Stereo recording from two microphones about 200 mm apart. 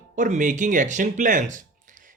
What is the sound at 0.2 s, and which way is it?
Speech, 40° right (ahead or behind).